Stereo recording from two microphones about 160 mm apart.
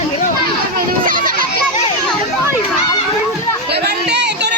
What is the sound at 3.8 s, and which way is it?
Chatter, 90° right.